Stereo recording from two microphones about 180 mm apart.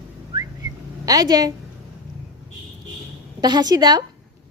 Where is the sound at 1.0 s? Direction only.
20° right (ahead or behind).